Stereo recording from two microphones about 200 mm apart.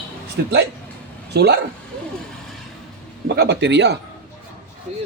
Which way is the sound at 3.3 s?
55° right (ahead or behind).